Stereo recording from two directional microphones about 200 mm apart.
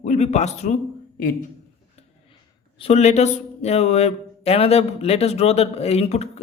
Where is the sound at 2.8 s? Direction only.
35° left (ahead or behind).